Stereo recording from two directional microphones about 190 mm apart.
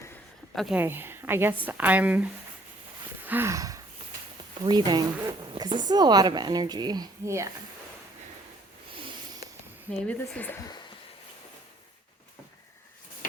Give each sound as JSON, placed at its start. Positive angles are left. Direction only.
{"t": 0.5, "sound": "speech", "side_deg": -5}
{"t": 3.2, "sound": "a sound", "side_deg": -10}
{"t": 4.6, "sound": "speech", "side_deg": -20}
{"t": 10.1, "sound": "speech", "side_deg": 10}